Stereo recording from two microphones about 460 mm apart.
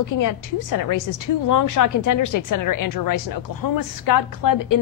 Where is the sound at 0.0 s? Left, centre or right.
Left.